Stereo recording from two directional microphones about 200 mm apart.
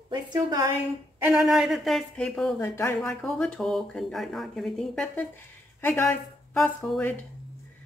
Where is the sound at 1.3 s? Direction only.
Centre (ahead or behind).